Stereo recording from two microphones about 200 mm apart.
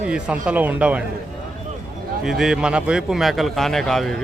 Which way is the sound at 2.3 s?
Centre (ahead or behind).